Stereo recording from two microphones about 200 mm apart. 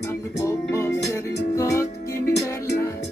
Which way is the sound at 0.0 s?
15° left (ahead or behind).